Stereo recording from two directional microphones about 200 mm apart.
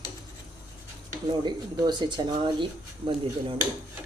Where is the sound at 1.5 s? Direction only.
20° right (ahead or behind).